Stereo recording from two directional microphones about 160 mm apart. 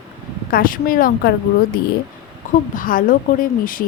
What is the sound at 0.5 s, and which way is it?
Speech, 60° left (ahead or behind).